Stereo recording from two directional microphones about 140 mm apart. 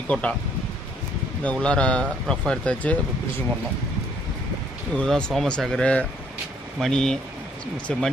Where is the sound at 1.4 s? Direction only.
5° left (ahead or behind).